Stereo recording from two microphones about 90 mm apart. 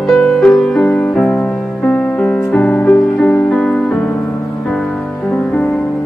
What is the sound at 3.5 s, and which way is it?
Music, 10° left (ahead or behind).